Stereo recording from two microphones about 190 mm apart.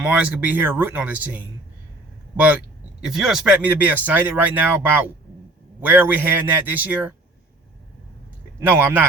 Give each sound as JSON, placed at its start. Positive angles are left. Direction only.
{"t": 0.0, "sound": "speech", "side_deg": -5}
{"t": 8.6, "sound": "speech", "side_deg": -10}